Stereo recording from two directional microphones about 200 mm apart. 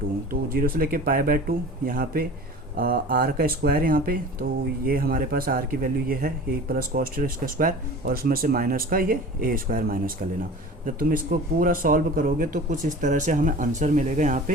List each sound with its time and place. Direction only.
0.3 s speech: 45° right (ahead or behind)